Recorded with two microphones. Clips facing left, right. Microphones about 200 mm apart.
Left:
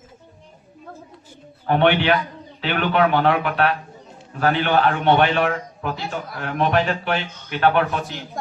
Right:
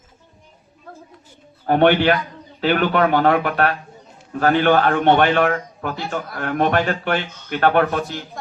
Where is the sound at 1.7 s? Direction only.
45° right (ahead or behind).